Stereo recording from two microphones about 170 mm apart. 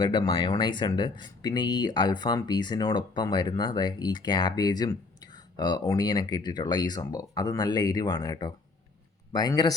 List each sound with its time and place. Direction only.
0.0 s speech: 30° left (ahead or behind)